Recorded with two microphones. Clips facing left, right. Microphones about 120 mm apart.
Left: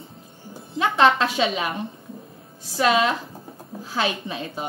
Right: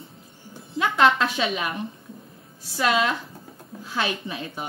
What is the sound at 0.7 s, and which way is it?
A woman's voice, 30° left (ahead or behind).